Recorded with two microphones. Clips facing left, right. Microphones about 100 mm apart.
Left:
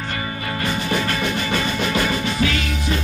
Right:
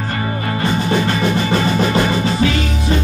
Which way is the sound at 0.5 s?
25° right (ahead or behind).